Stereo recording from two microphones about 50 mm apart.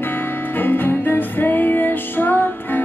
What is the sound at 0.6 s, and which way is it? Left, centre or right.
Music, left.